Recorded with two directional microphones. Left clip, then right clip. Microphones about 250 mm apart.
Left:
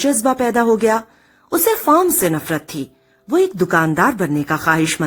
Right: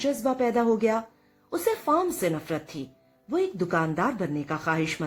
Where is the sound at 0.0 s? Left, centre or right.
Left.